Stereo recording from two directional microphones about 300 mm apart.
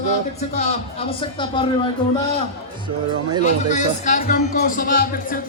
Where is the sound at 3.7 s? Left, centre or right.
Left.